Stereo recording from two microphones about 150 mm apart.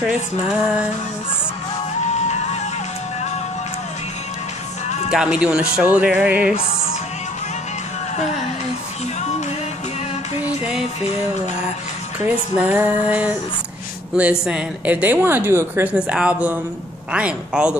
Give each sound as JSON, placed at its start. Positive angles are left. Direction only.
{"t": 2.1, "sound": "music", "side_deg": 50}
{"t": 5.1, "sound": "a woman's voice", "side_deg": -5}
{"t": 12.3, "sound": "a woman's voice", "side_deg": -10}
{"t": 14.4, "sound": "a woman's voice", "side_deg": -10}